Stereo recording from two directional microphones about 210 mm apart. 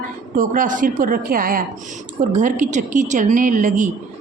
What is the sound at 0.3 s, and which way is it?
A woman's voice, 40° right (ahead or behind).